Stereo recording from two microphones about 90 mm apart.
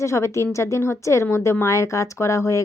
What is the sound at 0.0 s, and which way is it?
Speech, 35° left (ahead or behind).